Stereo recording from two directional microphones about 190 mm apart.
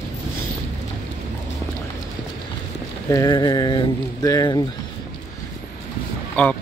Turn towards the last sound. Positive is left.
turn(degrees=10)  # may be behind; listen again after turning